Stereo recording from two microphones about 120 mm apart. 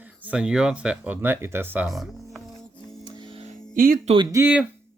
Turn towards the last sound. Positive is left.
turn(degrees=-15)  # may be behind; listen again after turning